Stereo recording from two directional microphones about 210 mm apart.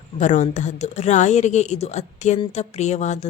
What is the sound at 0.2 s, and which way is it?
Speech, 35° left (ahead or behind).